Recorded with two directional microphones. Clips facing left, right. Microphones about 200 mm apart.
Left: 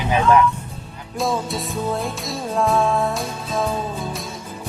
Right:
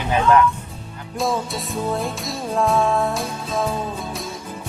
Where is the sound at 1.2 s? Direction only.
Centre (ahead or behind).